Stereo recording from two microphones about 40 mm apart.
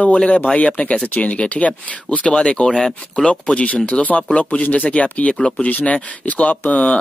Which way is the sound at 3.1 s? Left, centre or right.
Left.